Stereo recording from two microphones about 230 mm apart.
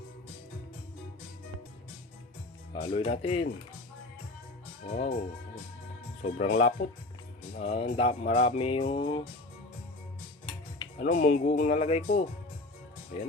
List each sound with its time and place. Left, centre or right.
2.7 s speech: left
4.9 s speech: left
6.2 s speech: left
10.4 s speech: left